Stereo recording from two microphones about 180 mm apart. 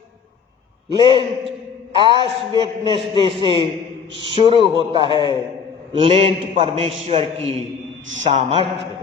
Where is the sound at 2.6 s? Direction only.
30° right (ahead or behind).